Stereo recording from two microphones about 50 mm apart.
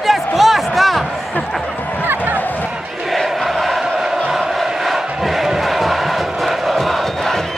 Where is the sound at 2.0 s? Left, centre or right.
Right.